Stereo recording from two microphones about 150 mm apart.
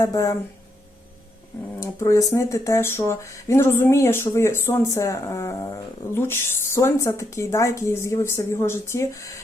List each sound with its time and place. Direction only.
0.0 s speech: 20° left (ahead or behind)
1.8 s speech: 20° left (ahead or behind)